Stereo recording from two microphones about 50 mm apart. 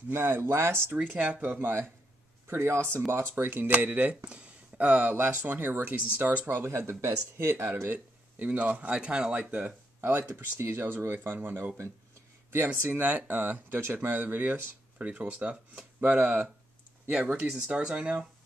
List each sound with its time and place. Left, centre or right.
0.1 s speech: right
0.9 s speech: right
2.4 s speech: right
5.3 s speech: right
7.9 s speech: right
8.9 s speech: centre
10.6 s speech: right
12.8 s speech: right
15.0 s speech: right